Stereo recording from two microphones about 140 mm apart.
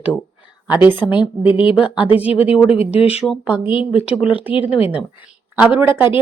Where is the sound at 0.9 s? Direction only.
35° left (ahead or behind).